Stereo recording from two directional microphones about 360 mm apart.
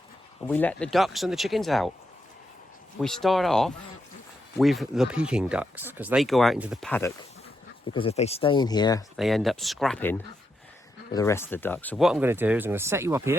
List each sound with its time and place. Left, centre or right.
0.4 s speech: centre
3.0 s speech: centre
7.9 s speech: centre
9.1 s speech: centre